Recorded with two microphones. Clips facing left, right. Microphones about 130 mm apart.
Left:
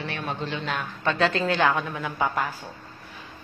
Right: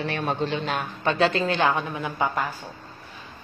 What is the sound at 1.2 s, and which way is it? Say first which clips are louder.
A woman's voice: right 1 dB; 10° right (ahead or behind).